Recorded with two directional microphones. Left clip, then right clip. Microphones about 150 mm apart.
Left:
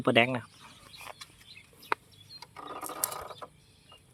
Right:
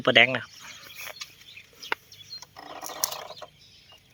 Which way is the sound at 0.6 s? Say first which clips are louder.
Right 6 dB; 5° left (ahead or behind).